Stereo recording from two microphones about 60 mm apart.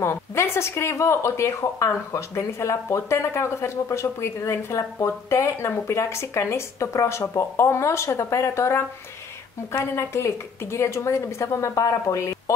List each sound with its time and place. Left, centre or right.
0.0 s speech: left